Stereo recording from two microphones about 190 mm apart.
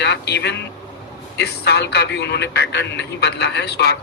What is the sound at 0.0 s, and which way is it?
A man's voice, 65° left (ahead or behind).